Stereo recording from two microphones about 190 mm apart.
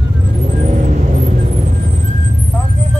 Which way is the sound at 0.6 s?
40° right (ahead or behind).